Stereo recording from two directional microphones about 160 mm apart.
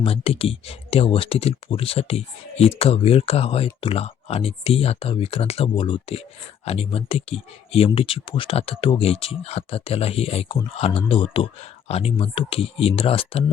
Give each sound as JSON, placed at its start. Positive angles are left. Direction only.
{"t": 0.0, "sound": "speech", "side_deg": 35}